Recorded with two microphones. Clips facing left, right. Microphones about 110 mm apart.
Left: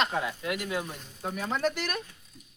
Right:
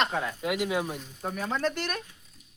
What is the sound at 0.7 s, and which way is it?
Speech, 20° right (ahead or behind).